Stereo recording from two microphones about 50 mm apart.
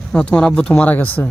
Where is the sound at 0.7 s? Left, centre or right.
Left.